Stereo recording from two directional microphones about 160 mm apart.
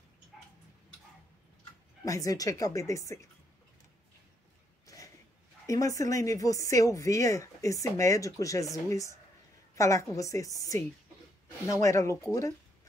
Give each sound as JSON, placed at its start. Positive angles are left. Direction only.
{"t": 2.0, "sound": "speech", "side_deg": 20}
{"t": 4.8, "sound": "a sound", "side_deg": 20}
{"t": 5.7, "sound": "a woman's voice", "side_deg": 20}